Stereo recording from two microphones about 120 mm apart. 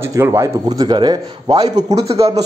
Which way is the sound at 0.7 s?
35° right (ahead or behind).